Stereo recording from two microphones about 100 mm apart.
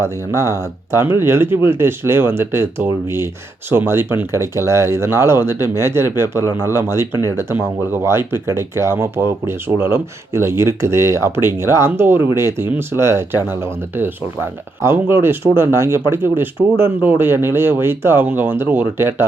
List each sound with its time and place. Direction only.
0.0 s speech: 30° right (ahead or behind)